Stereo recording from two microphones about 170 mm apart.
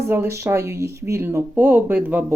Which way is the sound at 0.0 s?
15° right (ahead or behind).